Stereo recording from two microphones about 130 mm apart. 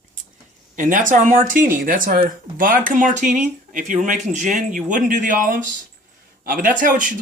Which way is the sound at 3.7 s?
80° right.